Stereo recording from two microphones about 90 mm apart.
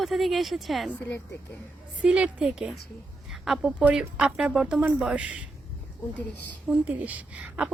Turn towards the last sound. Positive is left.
turn(degrees=-15)  # may be behind; listen again after turning